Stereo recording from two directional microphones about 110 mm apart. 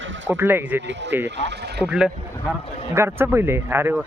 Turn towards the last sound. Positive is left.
turn(degrees=-20)  # may be behind; listen again after turning